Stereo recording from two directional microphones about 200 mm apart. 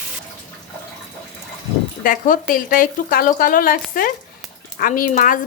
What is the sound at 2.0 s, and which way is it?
Speech, 40° left (ahead or behind).